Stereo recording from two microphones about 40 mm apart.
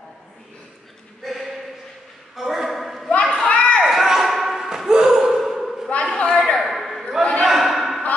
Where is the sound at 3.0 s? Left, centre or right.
Left.